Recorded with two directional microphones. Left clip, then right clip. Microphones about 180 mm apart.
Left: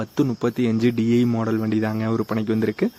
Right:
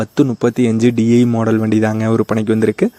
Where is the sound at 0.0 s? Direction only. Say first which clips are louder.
Right 8 dB; 35° right (ahead or behind).